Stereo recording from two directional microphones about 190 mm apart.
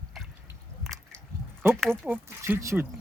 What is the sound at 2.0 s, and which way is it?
Speech, 10° right (ahead or behind).